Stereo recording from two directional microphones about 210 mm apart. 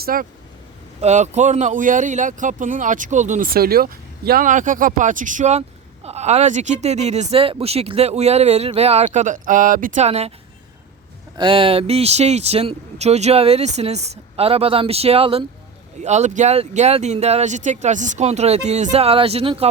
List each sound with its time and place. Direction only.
0.0 s speech: 45° right (ahead or behind)
1.0 s speech: 35° right (ahead or behind)
11.3 s speech: 25° right (ahead or behind)